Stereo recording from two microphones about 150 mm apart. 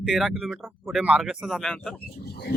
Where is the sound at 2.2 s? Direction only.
90° left.